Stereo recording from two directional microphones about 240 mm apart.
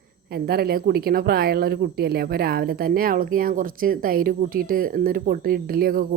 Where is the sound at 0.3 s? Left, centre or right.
Right.